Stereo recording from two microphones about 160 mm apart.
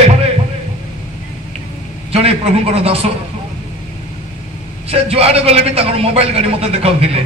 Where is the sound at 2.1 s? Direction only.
40° right (ahead or behind).